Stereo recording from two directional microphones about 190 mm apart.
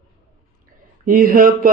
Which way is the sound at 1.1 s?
45° right (ahead or behind).